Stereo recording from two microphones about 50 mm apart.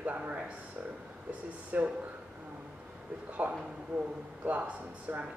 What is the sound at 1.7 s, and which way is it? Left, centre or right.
Speech, right.